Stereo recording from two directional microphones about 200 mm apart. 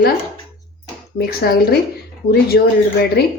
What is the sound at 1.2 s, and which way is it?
Speech, 50° left (ahead or behind).